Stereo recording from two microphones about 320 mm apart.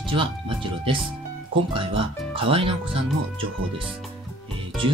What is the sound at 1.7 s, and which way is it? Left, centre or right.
Speech, centre.